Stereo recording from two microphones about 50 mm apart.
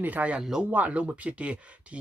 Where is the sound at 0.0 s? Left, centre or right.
Right.